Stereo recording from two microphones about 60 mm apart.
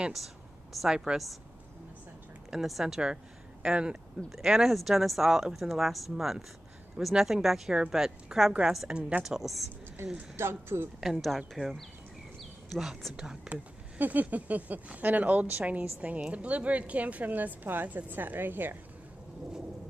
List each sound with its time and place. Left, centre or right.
0.8 s speech: centre
2.6 s speech: centre
10.0 s speech: right
11.0 s speech: centre
13.1 s speech: centre
13.5 s a woman's voice: right